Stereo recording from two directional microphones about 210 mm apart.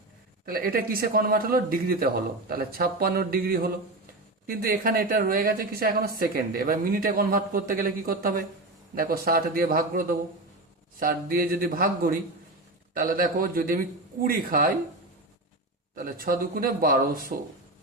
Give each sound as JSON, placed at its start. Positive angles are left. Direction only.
{"t": 0.4, "sound": "speech", "side_deg": -45}
{"t": 16.0, "sound": "speech", "side_deg": -40}